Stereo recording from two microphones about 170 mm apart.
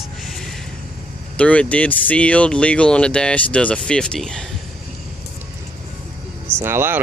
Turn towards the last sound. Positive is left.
turn(degrees=-15)  # may be behind; listen again after turning